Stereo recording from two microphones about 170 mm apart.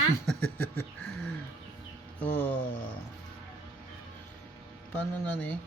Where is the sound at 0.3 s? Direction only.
10° left (ahead or behind).